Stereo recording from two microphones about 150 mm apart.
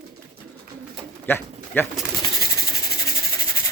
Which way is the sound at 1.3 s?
15° left (ahead or behind).